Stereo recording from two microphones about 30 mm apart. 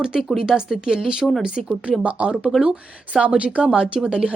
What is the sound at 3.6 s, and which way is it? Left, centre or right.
Speech, right.